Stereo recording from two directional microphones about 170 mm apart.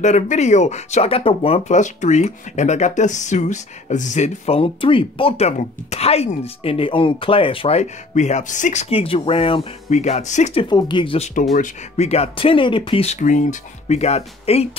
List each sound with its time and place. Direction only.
0.0 s speech: 45° left (ahead or behind)
11.5 s speech: 45° left (ahead or behind)